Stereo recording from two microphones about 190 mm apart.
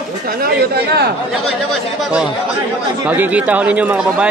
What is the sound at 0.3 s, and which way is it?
Speech, 55° right (ahead or behind).